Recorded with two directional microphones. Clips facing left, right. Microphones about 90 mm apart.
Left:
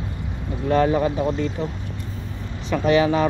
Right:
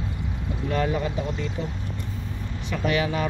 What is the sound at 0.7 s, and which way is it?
Speech, 40° left (ahead or behind).